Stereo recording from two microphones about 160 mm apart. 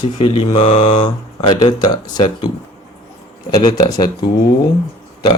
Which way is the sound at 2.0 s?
25° left (ahead or behind).